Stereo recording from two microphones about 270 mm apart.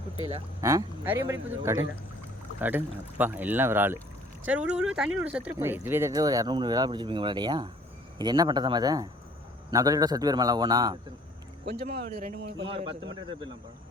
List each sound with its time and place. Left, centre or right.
0.2 s a man's voice: right
0.6 s speech: centre
11.6 s speech: right
12.6 s a man's voice: centre